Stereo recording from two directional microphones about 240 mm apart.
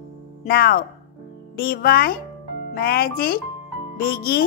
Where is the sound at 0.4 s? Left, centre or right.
Left.